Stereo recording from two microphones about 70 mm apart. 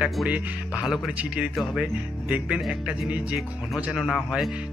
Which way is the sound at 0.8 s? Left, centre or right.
Centre.